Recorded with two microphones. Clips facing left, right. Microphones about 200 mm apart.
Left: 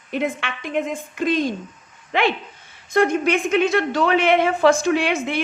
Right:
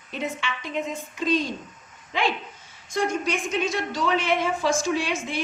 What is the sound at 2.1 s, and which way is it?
A woman's voice, 65° left (ahead or behind).